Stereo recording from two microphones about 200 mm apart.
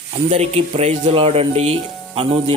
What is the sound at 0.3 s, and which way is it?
Speech, 30° right (ahead or behind).